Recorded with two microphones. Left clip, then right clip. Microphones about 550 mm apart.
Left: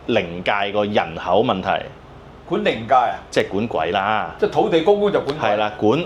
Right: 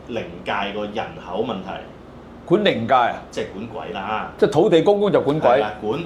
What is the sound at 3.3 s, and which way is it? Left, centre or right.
Speech, left.